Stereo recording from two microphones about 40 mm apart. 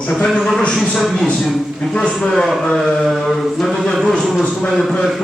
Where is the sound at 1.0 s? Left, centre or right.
Centre.